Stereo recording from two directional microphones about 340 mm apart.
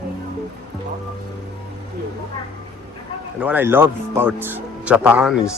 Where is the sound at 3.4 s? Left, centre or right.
Centre.